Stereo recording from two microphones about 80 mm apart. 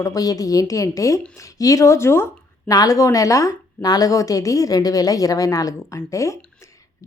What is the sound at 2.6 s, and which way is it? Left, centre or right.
Speech, left.